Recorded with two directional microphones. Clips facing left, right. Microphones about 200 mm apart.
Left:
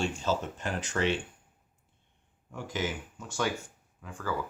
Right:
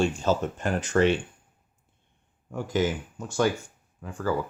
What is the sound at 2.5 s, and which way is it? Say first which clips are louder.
Speech: right 8 dB; 45° right (ahead or behind).